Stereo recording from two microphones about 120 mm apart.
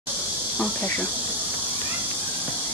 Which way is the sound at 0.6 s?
10° left (ahead or behind).